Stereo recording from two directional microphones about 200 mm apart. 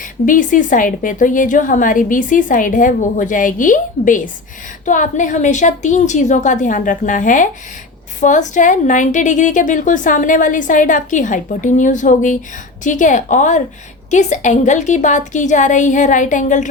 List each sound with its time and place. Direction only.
0.0 s a woman's voice: 40° left (ahead or behind)